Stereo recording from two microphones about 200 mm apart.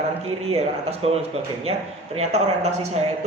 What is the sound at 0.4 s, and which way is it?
Speech, 30° right (ahead or behind).